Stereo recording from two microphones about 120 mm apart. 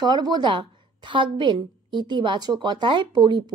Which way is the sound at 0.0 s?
35° right (ahead or behind).